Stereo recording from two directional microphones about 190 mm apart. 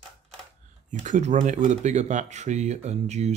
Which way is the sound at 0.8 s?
40° right (ahead or behind).